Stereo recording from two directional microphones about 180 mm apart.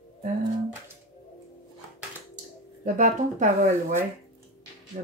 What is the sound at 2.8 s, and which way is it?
Speech, 45° right (ahead or behind).